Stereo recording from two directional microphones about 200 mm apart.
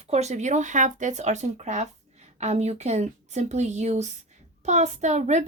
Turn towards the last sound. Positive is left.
turn(degrees=-35)  # may be behind; listen again after turning